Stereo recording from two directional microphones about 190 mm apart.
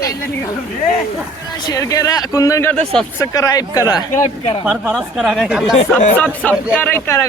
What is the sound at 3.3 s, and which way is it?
Speech, 20° left (ahead or behind).